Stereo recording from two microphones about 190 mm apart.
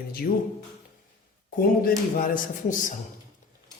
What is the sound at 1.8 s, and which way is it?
A man's voice, 50° left (ahead or behind).